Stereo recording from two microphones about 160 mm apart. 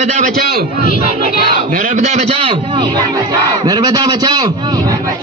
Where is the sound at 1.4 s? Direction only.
55° right (ahead or behind); by 4.9 s 25° right (ahead or behind).